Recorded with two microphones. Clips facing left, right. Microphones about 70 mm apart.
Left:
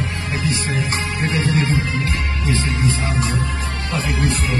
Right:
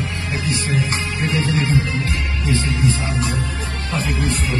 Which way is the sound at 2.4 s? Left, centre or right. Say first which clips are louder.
Right 1 dB; left.